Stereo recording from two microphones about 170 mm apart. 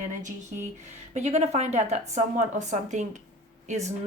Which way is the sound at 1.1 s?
40° right (ahead or behind).